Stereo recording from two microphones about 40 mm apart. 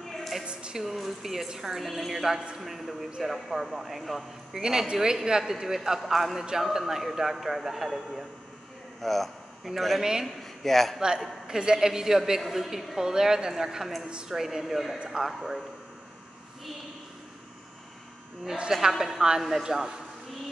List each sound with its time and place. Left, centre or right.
0.5 s music: right
0.7 s a man's voice: centre
1.8 s a man's voice: centre
4.6 s a man's voice: centre
9.0 s a man's voice: centre
11.0 s a man's voice: centre
18.7 s a man's voice: centre